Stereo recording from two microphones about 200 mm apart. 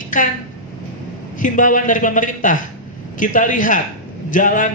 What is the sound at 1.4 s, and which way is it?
A man's voice, 40° left (ahead or behind).